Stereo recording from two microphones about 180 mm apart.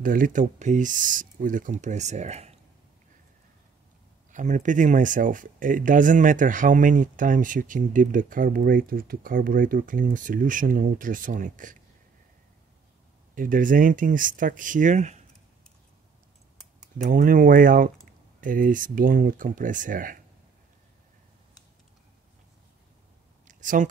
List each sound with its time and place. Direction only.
0.0 s speech: 50° right (ahead or behind)
4.3 s speech: 45° right (ahead or behind)
13.3 s speech: 50° right (ahead or behind)
17.0 s speech: 50° right (ahead or behind)
23.4 s a sound: 45° right (ahead or behind)